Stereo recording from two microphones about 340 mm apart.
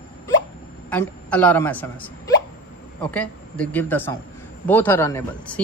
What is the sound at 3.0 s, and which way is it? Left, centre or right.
Speech, centre.